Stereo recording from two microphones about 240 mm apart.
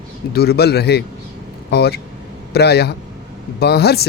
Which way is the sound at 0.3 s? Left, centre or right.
Left.